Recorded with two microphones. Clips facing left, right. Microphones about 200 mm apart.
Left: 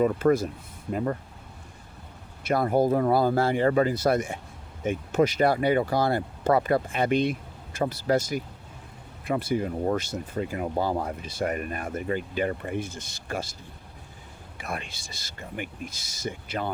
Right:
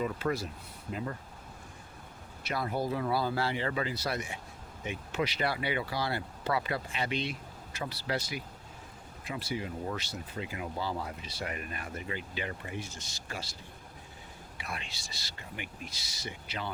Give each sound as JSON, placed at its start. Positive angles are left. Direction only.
{"t": 0.0, "sound": "speech", "side_deg": 50}
{"t": 2.4, "sound": "speech", "side_deg": 50}
{"t": 14.6, "sound": "speech", "side_deg": 50}